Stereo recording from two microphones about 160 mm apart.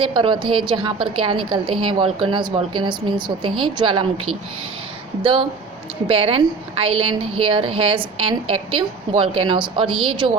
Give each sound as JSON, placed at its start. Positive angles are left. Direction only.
{"t": 0.0, "sound": "a woman's voice", "side_deg": -30}
{"t": 5.2, "sound": "a woman's voice", "side_deg": -30}